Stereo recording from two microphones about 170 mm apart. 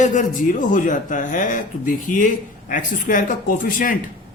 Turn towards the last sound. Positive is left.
turn(degrees=50)  # may be behind; listen again after turning